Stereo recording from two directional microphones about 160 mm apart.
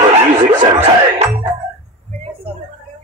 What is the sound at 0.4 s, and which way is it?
Music, 45° right (ahead or behind).